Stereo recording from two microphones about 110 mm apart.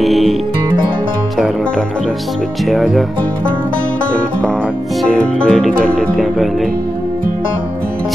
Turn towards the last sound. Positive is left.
turn(degrees=5)  # may be behind; listen again after turning